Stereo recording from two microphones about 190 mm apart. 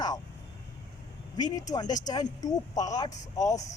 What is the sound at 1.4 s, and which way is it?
Speech, 20° left (ahead or behind).